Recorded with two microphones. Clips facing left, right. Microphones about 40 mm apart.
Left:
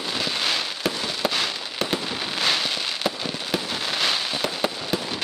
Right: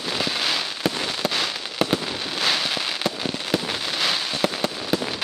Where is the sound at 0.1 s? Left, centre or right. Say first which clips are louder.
Right 1 dB; centre.